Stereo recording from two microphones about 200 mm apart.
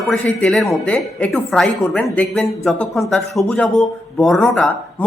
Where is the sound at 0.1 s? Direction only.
5° left (ahead or behind).